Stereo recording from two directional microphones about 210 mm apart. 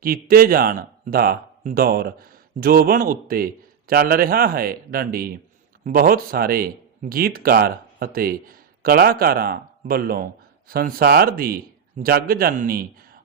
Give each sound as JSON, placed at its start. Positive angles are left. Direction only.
{"t": 0.0, "sound": "a man's voice", "side_deg": -45}